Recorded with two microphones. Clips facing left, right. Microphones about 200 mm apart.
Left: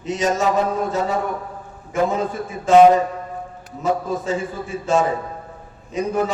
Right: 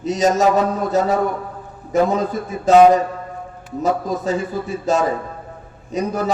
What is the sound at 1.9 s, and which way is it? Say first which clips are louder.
Speech: right 3 dB; 40° right (ahead or behind).